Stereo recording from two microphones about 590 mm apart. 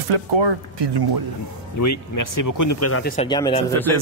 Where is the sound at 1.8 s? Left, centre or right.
Left; by 3.9 s centre.